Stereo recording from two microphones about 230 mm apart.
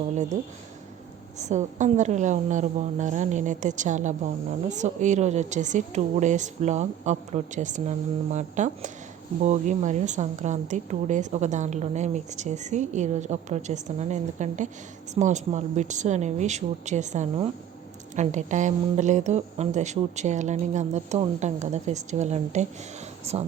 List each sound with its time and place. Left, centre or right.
1.4 s a woman's voice: right